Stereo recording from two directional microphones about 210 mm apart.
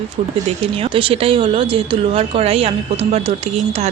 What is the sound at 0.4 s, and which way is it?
Speech, 25° right (ahead or behind).